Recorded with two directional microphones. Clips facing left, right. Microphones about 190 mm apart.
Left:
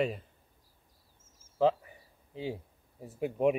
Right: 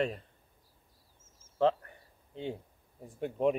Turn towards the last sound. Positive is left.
turn(degrees=5)  # may be behind; listen again after turning